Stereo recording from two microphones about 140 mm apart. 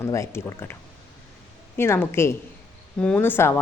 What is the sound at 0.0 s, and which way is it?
A woman's voice, 20° left (ahead or behind).